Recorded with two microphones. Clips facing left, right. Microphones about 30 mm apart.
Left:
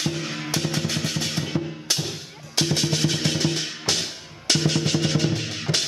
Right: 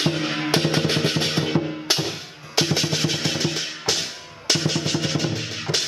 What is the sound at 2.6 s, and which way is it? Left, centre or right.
Music, centre.